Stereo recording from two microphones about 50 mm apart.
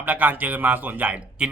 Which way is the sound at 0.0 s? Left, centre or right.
Right.